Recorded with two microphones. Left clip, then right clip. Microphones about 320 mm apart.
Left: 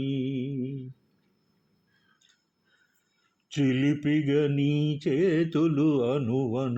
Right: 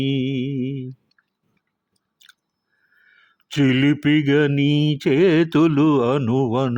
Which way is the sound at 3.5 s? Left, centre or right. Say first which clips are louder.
Right 8 dB; right.